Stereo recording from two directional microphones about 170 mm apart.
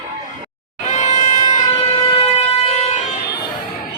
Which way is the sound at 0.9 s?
40° left (ahead or behind).